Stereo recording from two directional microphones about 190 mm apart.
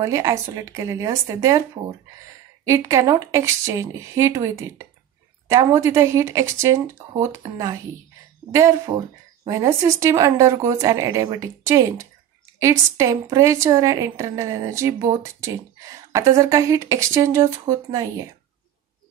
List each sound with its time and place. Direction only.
0.0 s a woman's voice: 15° right (ahead or behind)